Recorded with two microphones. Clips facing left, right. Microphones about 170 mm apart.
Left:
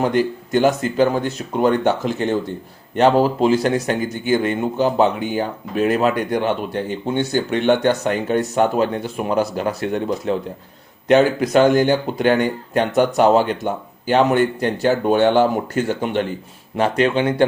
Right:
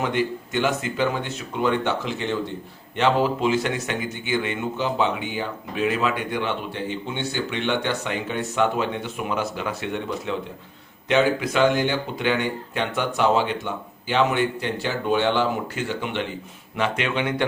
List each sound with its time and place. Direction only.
0.0 s speech: 40° left (ahead or behind)